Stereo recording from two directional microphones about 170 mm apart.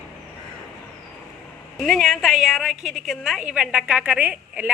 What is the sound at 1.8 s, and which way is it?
A woman's voice, centre (ahead or behind).